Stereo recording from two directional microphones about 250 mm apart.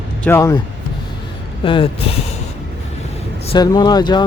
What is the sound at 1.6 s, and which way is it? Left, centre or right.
Speech, left.